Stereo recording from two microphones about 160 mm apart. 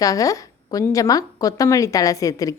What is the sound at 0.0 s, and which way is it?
A woman's voice, 20° left (ahead or behind).